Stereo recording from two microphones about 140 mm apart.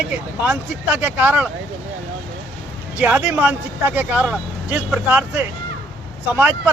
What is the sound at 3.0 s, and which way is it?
Speech, 10° right (ahead or behind).